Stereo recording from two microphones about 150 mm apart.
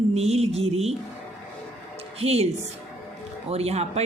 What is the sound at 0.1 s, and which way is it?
Speech, 45° right (ahead or behind).